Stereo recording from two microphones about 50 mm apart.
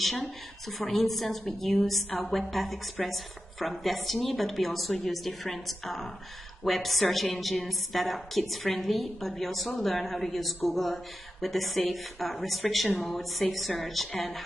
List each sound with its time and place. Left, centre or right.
0.0 s a woman's voice: centre